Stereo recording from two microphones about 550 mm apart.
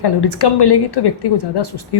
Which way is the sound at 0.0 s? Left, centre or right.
Left.